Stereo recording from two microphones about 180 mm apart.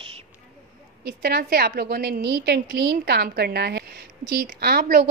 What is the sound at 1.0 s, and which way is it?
A woman's voice, 60° right (ahead or behind).